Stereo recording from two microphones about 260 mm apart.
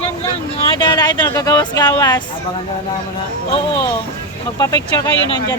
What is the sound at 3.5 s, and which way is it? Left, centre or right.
Speech, centre.